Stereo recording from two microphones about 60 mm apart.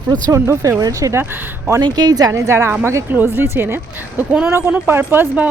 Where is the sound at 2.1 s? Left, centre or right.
Right.